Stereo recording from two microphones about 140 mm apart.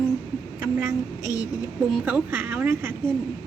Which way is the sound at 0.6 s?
10° right (ahead or behind).